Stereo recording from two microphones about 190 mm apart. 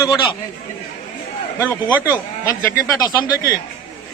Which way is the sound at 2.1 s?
20° left (ahead or behind).